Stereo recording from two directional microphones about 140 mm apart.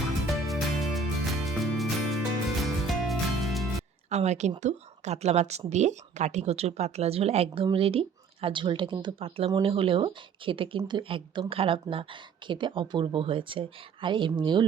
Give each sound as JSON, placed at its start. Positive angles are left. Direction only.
{"t": 0.4, "sound": "music", "side_deg": 0}
{"t": 4.1, "sound": "speech", "side_deg": -55}